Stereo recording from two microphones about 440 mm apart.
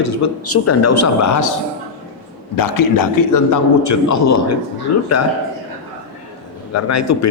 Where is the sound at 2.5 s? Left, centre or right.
Left.